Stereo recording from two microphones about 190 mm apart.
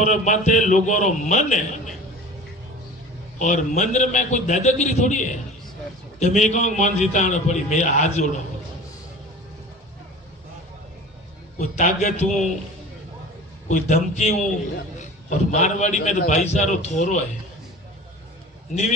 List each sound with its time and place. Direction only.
0.0 s a man's voice: 40° left (ahead or behind)
3.3 s a man's voice: 40° left (ahead or behind)
11.5 s a man's voice: 40° left (ahead or behind)
13.7 s a man's voice: 40° left (ahead or behind)